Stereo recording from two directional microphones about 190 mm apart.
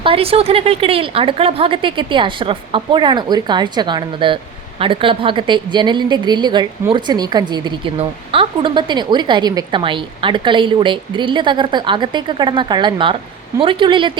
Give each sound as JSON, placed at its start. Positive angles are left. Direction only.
{"t": 0.0, "sound": "a woman's voice", "side_deg": -30}